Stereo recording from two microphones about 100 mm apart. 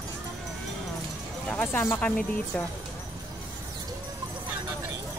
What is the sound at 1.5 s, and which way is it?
Speech, 15° left (ahead or behind).